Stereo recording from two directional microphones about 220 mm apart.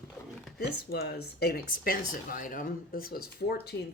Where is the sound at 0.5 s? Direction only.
45° left (ahead or behind).